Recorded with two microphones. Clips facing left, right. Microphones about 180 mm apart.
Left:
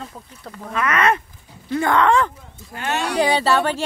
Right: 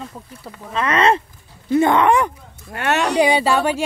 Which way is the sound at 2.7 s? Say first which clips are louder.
Right 5 dB; 70° right (ahead or behind).